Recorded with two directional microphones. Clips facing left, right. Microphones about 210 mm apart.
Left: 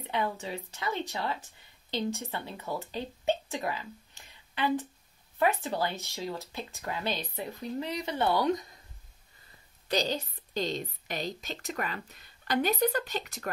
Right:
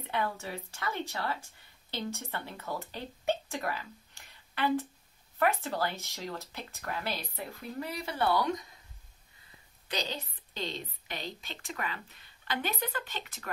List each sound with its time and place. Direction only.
0.0 s speech: 15° left (ahead or behind)
9.8 s a woman's voice: 40° left (ahead or behind)